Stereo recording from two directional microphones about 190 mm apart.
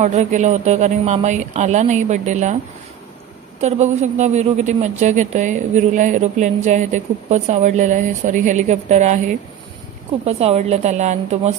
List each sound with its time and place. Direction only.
0.0 s a woman's voice: 35° right (ahead or behind)
3.6 s a woman's voice: 35° right (ahead or behind)